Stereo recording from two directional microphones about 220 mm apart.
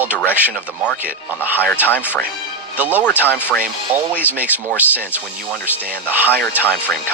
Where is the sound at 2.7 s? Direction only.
5° right (ahead or behind).